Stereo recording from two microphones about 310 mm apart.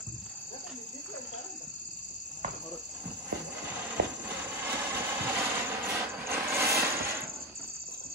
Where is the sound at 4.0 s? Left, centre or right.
Right.